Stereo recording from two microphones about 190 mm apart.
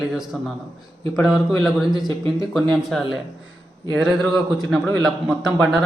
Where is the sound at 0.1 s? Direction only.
Centre (ahead or behind).